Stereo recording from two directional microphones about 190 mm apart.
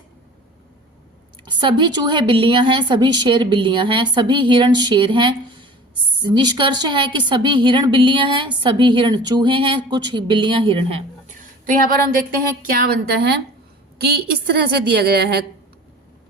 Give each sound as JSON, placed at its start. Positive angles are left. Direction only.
{"t": 1.5, "sound": "a woman's voice", "side_deg": -25}
{"t": 12.7, "sound": "a woman's voice", "side_deg": -50}